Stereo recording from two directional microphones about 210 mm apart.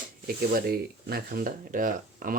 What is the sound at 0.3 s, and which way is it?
Speech, 45° right (ahead or behind).